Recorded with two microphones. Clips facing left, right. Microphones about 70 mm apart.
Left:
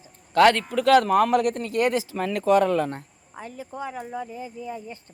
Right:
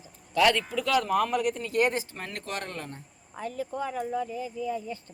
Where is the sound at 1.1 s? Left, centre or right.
Left.